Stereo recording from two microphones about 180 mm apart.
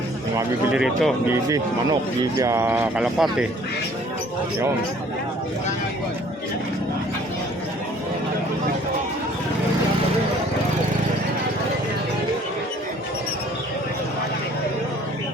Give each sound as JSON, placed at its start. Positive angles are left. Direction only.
{"t": 0.7, "sound": "speech", "side_deg": -5}
{"t": 1.5, "sound": "a man's voice", "side_deg": -20}